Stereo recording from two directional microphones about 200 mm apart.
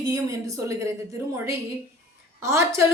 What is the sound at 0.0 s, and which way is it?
Speech, 15° right (ahead or behind).